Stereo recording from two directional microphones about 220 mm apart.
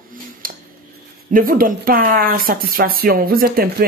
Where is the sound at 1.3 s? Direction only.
40° right (ahead or behind).